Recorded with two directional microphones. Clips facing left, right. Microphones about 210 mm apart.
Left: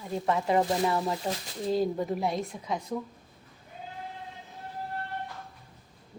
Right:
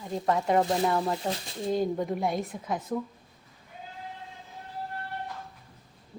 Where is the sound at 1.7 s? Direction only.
Centre (ahead or behind).